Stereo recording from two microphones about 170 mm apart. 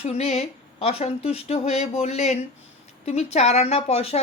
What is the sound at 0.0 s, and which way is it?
Speech, 40° left (ahead or behind).